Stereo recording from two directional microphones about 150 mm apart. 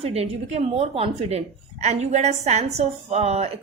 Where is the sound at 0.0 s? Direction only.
45° right (ahead or behind).